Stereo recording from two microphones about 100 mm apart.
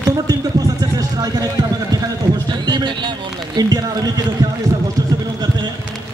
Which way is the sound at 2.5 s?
45° right (ahead or behind).